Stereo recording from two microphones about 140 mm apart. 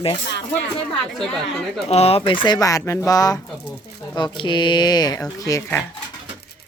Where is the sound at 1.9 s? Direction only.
45° left (ahead or behind); by 5.7 s 25° left (ahead or behind).